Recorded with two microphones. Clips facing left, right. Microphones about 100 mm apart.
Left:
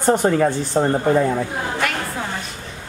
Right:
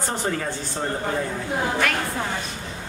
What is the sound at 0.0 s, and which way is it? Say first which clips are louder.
Speech: left 10 dB; 50° left (ahead or behind).